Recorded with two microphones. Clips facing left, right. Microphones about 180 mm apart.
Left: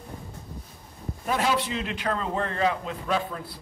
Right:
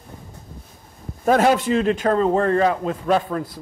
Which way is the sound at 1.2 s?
50° right (ahead or behind).